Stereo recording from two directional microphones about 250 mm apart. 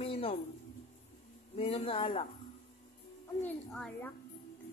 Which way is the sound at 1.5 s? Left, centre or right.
Left.